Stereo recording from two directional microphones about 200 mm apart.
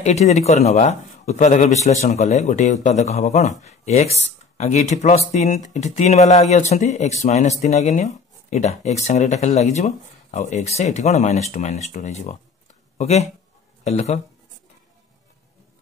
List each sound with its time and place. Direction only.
0.0 s speech: 35° left (ahead or behind)